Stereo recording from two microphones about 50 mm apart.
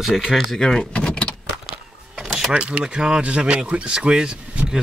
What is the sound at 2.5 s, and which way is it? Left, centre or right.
Speech, centre.